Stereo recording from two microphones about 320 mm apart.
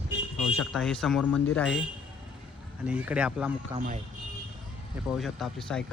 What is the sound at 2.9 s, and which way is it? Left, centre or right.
Speech, centre.